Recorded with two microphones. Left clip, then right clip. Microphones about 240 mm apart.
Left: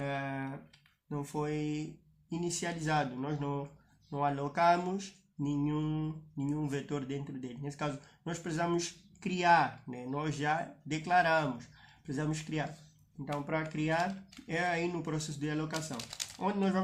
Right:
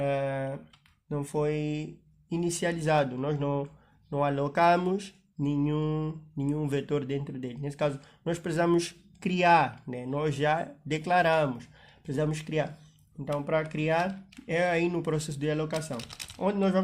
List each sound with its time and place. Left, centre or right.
0.0 s computer keyboard: right
1.1 s mantra: right
2.3 s speech: right
4.1 s mantra: right
16.0 s speech: right